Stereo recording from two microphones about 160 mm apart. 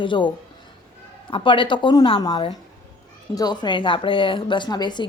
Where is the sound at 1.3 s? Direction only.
30° left (ahead or behind).